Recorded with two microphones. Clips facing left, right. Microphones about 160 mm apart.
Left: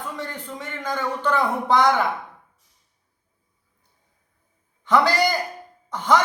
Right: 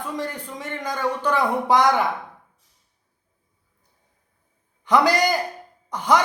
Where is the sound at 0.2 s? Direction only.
15° right (ahead or behind).